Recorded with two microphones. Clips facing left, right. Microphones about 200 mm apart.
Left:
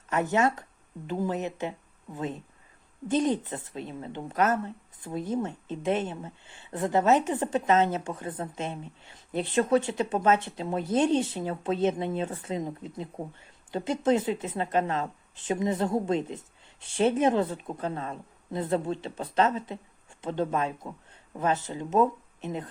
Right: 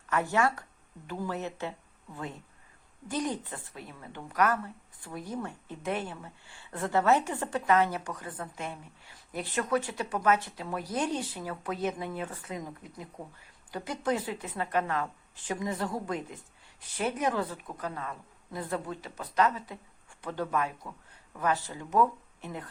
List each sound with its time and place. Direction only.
0.1 s a woman's voice: 20° left (ahead or behind)